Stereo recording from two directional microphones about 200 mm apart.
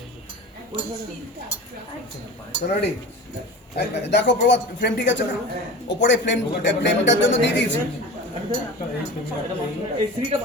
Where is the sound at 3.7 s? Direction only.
60° left (ahead or behind).